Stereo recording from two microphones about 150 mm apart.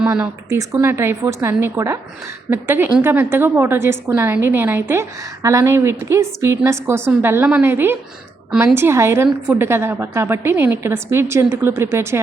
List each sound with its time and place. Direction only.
0.0 s a woman's voice: 10° right (ahead or behind)